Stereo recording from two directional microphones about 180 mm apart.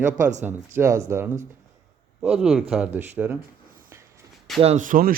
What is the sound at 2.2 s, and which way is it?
Speech, 5° right (ahead or behind).